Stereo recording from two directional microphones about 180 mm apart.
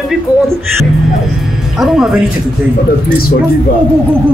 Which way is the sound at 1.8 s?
Centre (ahead or behind).